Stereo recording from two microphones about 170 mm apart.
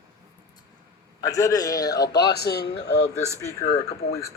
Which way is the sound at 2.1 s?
80° left.